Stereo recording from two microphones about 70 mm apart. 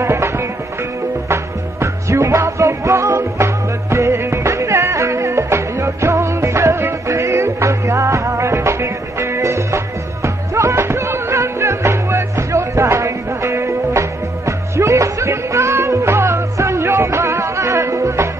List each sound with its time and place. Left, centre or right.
0.0 s music: right